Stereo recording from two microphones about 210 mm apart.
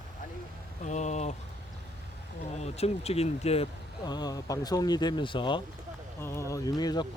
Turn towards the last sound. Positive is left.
turn(degrees=20)  # may be behind; listen again after turning